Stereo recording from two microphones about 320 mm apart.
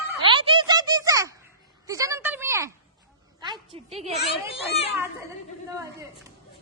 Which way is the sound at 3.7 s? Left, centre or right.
Centre.